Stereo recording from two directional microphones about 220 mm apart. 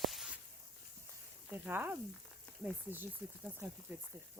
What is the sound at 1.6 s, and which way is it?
Frying, 10° right (ahead or behind).